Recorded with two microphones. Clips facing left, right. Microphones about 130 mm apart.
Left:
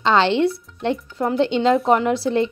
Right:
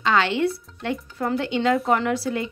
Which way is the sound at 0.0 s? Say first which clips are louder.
Left 4 dB; 25° left (ahead or behind).